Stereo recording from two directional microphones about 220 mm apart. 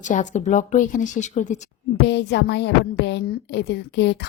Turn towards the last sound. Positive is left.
turn(degrees=50)  # may be behind; listen again after turning